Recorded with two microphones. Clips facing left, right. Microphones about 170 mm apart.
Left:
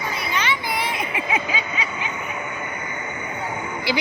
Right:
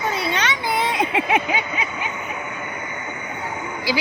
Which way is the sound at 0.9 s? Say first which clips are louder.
Right 5 dB; 70° right (ahead or behind).